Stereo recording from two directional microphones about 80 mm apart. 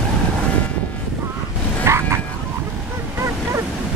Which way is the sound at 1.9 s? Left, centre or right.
Right.